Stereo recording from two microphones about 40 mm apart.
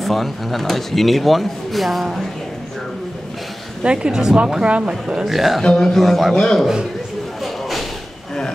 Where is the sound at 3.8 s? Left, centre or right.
Right.